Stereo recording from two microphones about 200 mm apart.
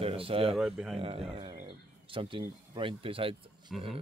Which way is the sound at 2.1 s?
25° right (ahead or behind).